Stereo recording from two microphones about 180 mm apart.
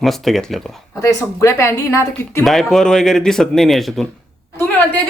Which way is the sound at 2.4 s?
Centre (ahead or behind).